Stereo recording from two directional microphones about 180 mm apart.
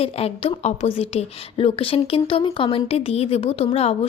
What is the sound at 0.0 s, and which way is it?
A woman's voice, 35° left (ahead or behind).